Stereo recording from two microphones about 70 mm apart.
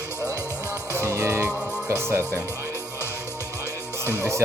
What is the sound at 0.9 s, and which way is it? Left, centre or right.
Music, right.